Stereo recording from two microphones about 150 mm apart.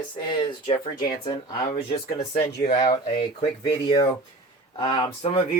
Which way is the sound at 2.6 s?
50° left (ahead or behind).